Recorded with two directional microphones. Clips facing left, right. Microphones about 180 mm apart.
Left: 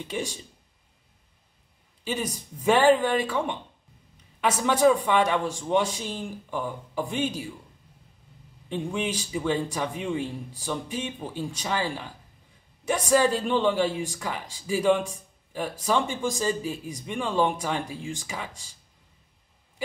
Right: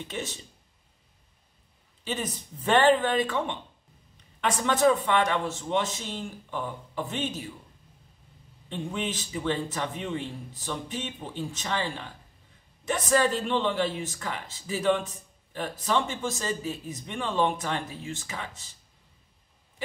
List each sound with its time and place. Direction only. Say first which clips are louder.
0.1 s speech: left 5 dB; 10° left (ahead or behind)
2.0 s speech: left 2 dB; 10° left (ahead or behind)
8.6 s speech: left 3 dB; 10° left (ahead or behind)